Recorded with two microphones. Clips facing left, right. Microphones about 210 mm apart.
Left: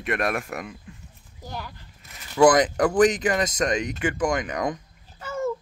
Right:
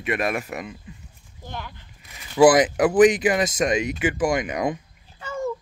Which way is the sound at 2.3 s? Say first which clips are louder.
Right 2 dB; 5° right (ahead or behind).